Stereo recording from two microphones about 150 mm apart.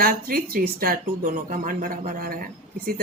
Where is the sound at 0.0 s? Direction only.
75° right (ahead or behind).